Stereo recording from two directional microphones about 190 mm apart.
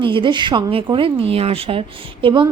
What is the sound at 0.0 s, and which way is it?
A woman's voice, 25° right (ahead or behind).